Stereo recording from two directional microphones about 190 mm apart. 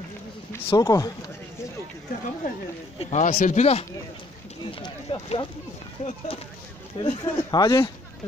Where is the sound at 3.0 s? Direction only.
35° left (ahead or behind).